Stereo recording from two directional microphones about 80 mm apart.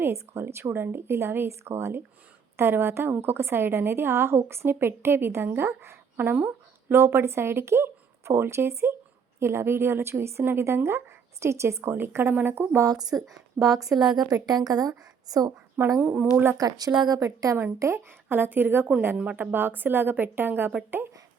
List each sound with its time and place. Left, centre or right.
0.0 s a woman's voice: right
12.8 s a woman's voice: right
13.2 s a woman's voice: centre
14.0 s a woman's voice: right
15.8 s speech: right
16.6 s a woman's voice: right
17.7 s speech: right